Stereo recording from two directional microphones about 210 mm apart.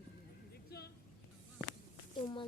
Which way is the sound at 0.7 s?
50° left (ahead or behind).